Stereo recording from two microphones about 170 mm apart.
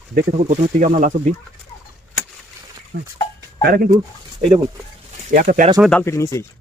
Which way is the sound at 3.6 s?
60° right (ahead or behind).